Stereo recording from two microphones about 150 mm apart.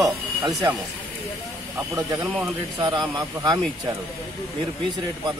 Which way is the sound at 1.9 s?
20° right (ahead or behind).